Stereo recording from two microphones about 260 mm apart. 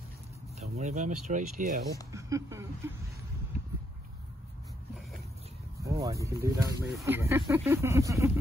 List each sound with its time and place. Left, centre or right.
0.6 s speech: right
2.1 s speech: centre
5.8 s speech: centre